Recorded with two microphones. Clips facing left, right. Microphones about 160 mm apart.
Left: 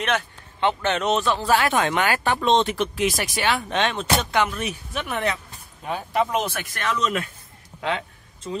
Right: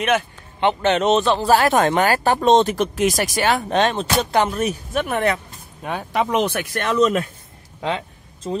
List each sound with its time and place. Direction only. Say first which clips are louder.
0.0 s speech: right 5 dB; 15° right (ahead or behind); by 5.4 s 55° right (ahead or behind)
5.9 s speech: right 2 dB; 70° right (ahead or behind)
6.8 s speech: right 7 dB; 40° right (ahead or behind)